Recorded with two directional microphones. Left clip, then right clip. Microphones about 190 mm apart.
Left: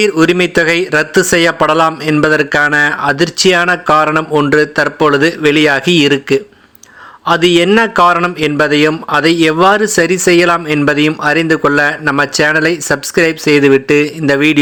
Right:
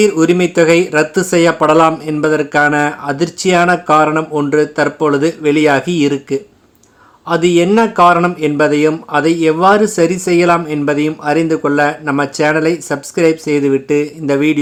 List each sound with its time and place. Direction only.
0.0 s speech: 15° left (ahead or behind)